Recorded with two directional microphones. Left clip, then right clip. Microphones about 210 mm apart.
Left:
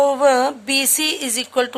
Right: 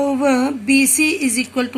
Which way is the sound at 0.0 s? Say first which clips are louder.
Left 3 dB; 50° left (ahead or behind).